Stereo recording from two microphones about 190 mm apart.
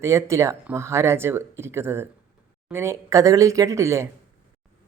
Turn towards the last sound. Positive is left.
turn(degrees=-15)  # may be behind; listen again after turning